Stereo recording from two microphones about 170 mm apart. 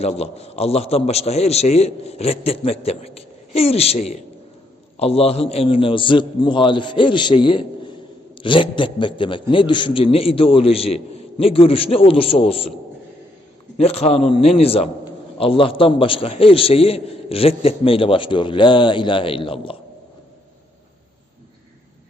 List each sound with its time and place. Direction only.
0.0 s a man's voice: 40° left (ahead or behind)
13.7 s a man's voice: 35° left (ahead or behind)